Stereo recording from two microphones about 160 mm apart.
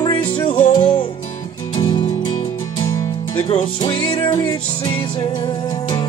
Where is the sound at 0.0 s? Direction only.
30° left (ahead or behind).